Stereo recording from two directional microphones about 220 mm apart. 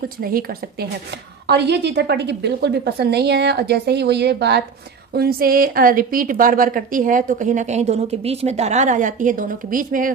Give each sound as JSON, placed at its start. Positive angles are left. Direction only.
{"t": 0.2, "sound": "a woman's voice", "side_deg": -40}